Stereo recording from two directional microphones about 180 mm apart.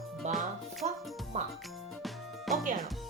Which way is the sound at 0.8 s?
35° right (ahead or behind).